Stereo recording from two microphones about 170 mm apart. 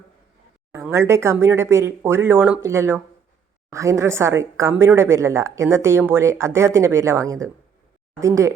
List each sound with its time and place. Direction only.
0.7 s a woman's voice: 15° right (ahead or behind)